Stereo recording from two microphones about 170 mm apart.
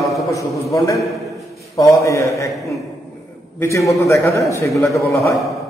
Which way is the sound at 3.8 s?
20° left (ahead or behind).